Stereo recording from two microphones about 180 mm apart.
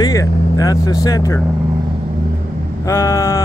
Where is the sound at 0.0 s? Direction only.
20° left (ahead or behind).